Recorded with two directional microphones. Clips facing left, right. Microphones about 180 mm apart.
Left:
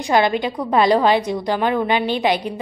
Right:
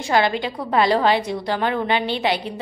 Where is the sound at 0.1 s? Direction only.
20° left (ahead or behind).